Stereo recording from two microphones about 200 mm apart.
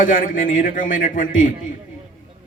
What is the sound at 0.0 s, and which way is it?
A man's voice, 45° left (ahead or behind).